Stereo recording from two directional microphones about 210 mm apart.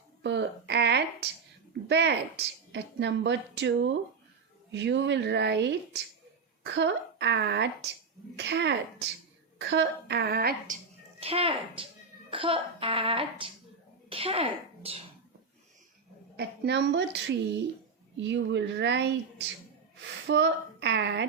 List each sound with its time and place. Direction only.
0.2 s a sound: 55° right (ahead or behind)
2.7 s a woman's voice: 55° right (ahead or behind)
11.2 s speech: 30° right (ahead or behind)
16.4 s a woman's voice: 55° right (ahead or behind)